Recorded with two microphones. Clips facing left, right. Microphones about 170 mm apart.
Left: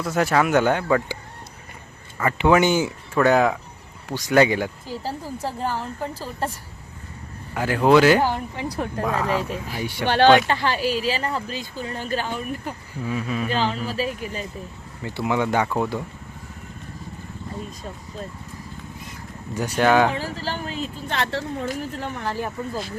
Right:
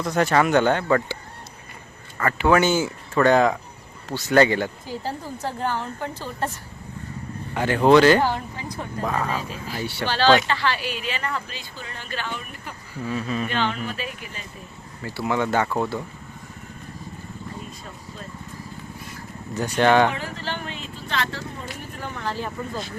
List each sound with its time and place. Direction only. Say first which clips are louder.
0.0 s speech: even; 5° left (ahead or behind)
2.1 s speech: left 1 dB; 15° left (ahead or behind)
7.5 s speech: right 1 dB; 5° left (ahead or behind)
8.5 s speech: left 6 dB; 65° left (ahead or behind)
9.0 s speech: left 2 dB; 5° left (ahead or behind)
10.5 s a woman's voice: left 3 dB; 45° left (ahead or behind)
13.1 s speech: even; 10° left (ahead or behind)
13.5 s a woman's voice: left 2 dB; 35° left (ahead or behind)
15.0 s speech: left 1 dB; 15° left (ahead or behind)
19.5 s speech: even; 10° left (ahead or behind)
20.1 s a woman's voice: left 2 dB; 35° left (ahead or behind)
21.2 s speech: left 7 dB; 70° left (ahead or behind)
22.0 s speech: right 2 dB; 15° left (ahead or behind)